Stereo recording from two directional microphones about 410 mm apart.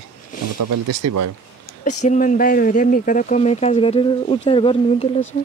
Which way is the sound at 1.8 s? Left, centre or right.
Centre.